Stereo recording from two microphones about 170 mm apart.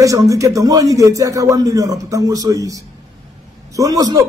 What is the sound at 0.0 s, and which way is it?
A man's voice, 20° right (ahead or behind).